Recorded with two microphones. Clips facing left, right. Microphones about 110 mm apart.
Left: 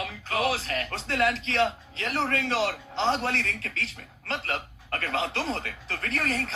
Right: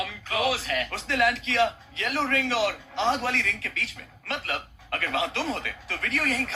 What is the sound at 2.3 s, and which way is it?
Speech, 45° left (ahead or behind).